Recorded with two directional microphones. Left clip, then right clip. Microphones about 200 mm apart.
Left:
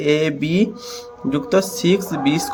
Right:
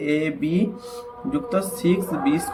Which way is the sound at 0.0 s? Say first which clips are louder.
Left 5 dB; 45° left (ahead or behind).